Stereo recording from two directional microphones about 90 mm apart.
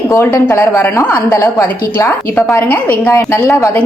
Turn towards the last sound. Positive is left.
turn(degrees=35)  # may be behind; listen again after turning